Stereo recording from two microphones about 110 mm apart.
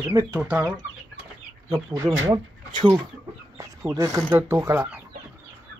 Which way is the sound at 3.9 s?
30° right (ahead or behind).